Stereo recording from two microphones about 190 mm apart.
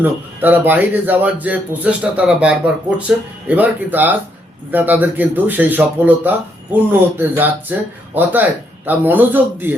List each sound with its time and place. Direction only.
0.0 s a man's voice: 10° right (ahead or behind)